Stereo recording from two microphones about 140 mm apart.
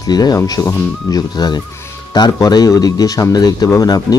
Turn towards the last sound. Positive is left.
turn(degrees=25)  # may be behind; listen again after turning